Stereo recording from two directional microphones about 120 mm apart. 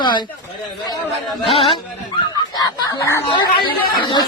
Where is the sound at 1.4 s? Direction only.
50° left (ahead or behind).